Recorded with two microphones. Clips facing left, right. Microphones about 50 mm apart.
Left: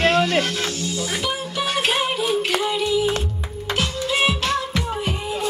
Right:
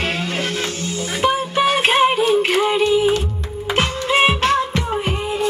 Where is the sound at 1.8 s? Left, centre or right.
Right.